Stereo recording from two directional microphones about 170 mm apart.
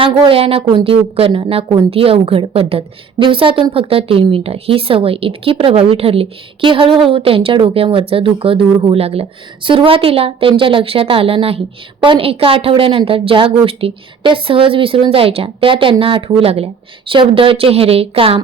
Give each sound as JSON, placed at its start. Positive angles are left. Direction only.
{"t": 0.0, "sound": "a woman's voice", "side_deg": -35}